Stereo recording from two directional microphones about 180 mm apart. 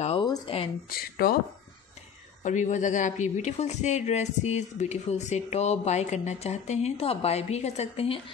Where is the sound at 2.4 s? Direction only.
40° left (ahead or behind).